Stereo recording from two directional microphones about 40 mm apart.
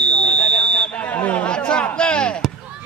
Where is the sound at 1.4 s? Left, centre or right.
Left.